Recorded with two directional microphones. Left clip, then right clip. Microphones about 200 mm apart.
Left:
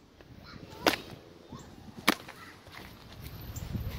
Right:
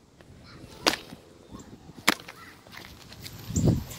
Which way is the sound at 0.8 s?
20° left (ahead or behind).